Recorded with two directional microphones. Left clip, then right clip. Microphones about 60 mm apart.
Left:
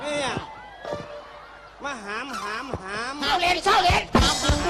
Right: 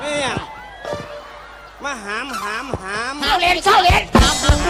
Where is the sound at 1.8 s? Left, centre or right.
Right.